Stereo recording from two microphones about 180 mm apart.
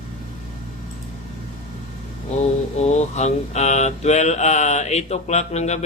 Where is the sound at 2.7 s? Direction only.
40° left (ahead or behind).